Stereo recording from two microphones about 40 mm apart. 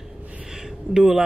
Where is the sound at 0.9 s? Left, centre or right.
Centre.